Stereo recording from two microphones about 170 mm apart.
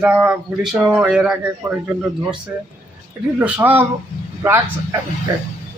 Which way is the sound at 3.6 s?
15° right (ahead or behind).